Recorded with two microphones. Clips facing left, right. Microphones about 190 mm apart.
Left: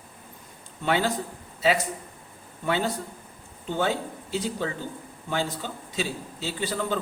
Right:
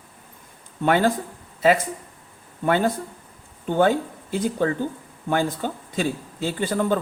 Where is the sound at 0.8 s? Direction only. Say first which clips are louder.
Right 6 dB; 50° right (ahead or behind).